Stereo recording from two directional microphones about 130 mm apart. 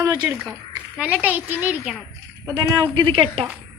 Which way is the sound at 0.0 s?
30° right (ahead or behind).